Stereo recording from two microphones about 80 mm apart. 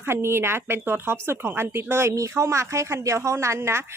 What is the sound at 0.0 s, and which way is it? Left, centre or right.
A woman's voice, right.